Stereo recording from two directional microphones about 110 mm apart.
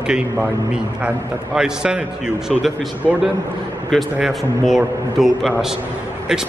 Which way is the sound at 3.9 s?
Centre (ahead or behind).